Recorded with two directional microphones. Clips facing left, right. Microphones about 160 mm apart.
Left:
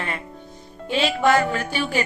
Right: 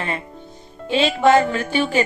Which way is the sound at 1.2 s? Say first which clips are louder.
Right 4 dB; 25° right (ahead or behind).